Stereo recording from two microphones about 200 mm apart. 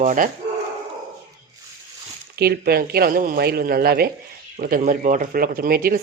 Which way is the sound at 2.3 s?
50° right (ahead or behind).